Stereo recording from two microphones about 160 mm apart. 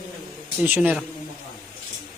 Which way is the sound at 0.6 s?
10° right (ahead or behind).